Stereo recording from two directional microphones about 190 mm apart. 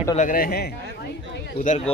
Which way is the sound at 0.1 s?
45° left (ahead or behind).